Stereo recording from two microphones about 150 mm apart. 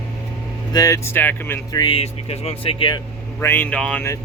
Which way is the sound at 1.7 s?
30° left (ahead or behind).